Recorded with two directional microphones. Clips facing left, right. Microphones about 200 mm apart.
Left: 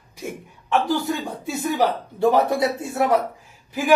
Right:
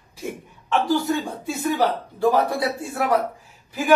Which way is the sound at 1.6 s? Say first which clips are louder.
Even; 25° left (ahead or behind).